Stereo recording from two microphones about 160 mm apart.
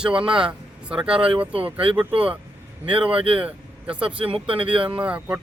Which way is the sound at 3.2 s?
35° right (ahead or behind).